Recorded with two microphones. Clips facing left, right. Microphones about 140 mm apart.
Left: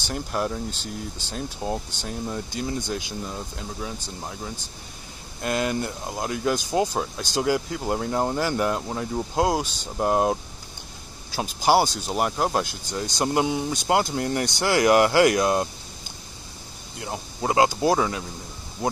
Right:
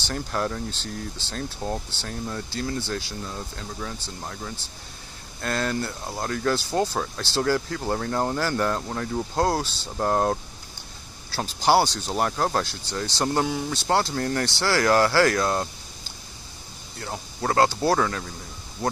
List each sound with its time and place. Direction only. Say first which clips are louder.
0.0 s speech: even; 10° left (ahead or behind)
17.0 s speech: left 1 dB; 15° left (ahead or behind)